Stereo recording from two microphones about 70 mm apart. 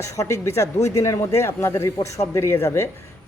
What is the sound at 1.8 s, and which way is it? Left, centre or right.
Speech, left.